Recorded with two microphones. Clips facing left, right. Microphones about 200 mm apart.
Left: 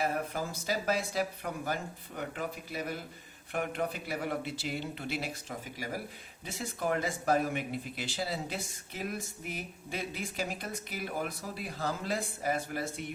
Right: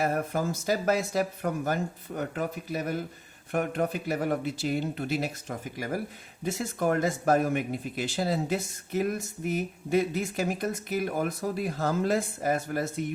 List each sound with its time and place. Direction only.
0.0 s speech: 50° right (ahead or behind)